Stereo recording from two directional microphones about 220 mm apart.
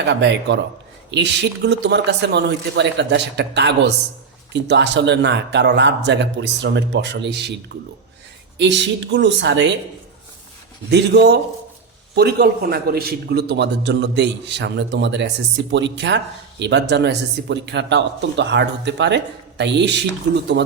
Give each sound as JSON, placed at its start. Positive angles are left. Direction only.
{"t": 0.1, "sound": "speech", "side_deg": -55}
{"t": 8.5, "sound": "speech", "side_deg": -55}
{"t": 10.9, "sound": "speech", "side_deg": -50}